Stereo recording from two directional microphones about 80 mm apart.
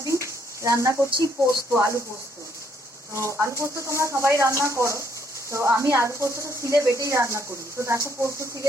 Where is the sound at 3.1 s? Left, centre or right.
Right.